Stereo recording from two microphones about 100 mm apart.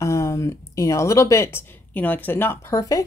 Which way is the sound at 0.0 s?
30° left (ahead or behind).